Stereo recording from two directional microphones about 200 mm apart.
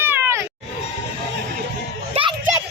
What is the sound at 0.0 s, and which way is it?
Cat, 10° right (ahead or behind).